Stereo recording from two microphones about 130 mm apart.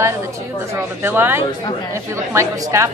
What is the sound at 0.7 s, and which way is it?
A woman's voice, 15° right (ahead or behind).